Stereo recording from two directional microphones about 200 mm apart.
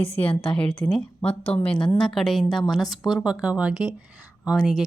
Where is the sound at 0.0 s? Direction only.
25° left (ahead or behind).